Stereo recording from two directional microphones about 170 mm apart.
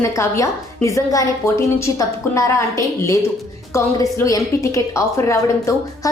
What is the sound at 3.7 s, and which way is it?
A woman's voice, 20° left (ahead or behind).